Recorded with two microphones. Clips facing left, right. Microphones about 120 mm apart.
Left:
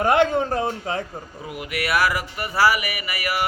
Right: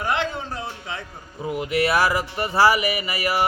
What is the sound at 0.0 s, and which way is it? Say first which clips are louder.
A man's voice: left 7 dB; 50° left (ahead or behind).